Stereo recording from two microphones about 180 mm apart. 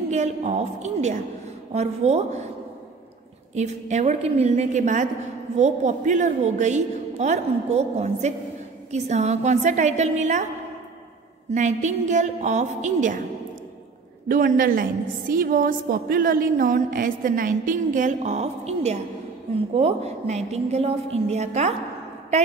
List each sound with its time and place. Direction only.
0.1 s a woman's voice: 40° right (ahead or behind)
3.5 s a woman's voice: 40° right (ahead or behind)
11.5 s a woman's voice: 40° right (ahead or behind)
14.2 s a woman's voice: 50° right (ahead or behind)